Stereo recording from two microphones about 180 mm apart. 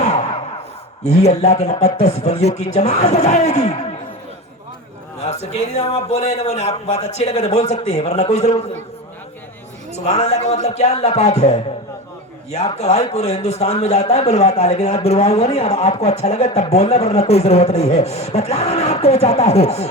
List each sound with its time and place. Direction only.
0.0 s a sound: 40° left (ahead or behind)
1.0 s a man's voice: 35° left (ahead or behind)
5.2 s a man's voice: 35° left (ahead or behind)
10.1 s a man's voice: 35° left (ahead or behind)